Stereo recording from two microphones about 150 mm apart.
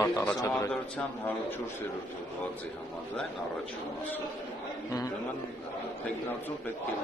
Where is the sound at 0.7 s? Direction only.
5° left (ahead or behind).